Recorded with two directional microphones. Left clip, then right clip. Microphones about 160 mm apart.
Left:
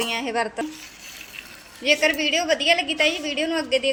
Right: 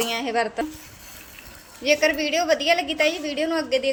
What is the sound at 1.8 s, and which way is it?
A woman's voice, centre (ahead or behind).